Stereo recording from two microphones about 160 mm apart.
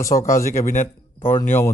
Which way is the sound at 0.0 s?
20° left (ahead or behind).